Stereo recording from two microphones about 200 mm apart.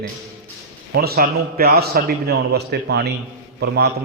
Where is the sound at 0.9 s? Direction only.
50° right (ahead or behind).